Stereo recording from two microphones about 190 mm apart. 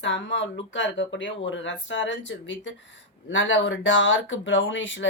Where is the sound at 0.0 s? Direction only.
75° left (ahead or behind).